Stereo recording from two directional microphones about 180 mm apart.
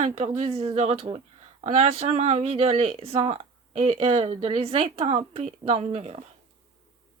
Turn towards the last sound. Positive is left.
turn(degrees=-35)  # may be behind; listen again after turning